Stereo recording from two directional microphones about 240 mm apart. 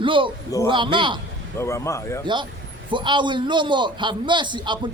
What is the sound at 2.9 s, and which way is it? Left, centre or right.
A man's voice, centre.